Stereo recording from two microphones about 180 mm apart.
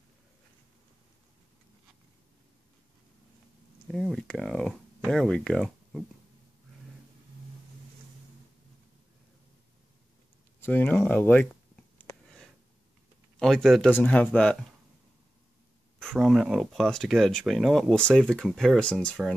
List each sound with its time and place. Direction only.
3.8 s speech: centre (ahead or behind)
10.6 s a sound: 10° left (ahead or behind)
13.4 s speech: centre (ahead or behind)
16.0 s speech: centre (ahead or behind)